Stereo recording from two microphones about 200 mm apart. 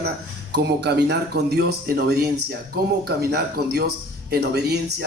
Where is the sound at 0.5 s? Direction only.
55° right (ahead or behind).